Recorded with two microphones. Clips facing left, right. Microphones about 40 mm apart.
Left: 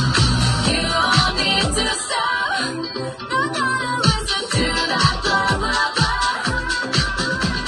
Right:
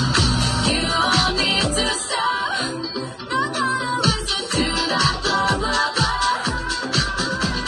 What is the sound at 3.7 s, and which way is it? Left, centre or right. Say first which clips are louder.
Music: left 1 dB; left.